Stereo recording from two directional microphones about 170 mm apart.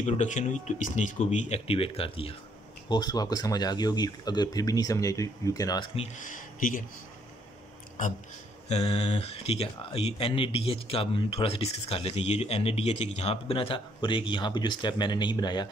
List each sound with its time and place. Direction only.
0.0 s speech: 45° left (ahead or behind); by 5.9 s 20° left (ahead or behind)
6.2 s speech: 50° left (ahead or behind)
8.6 s speech: 40° left (ahead or behind)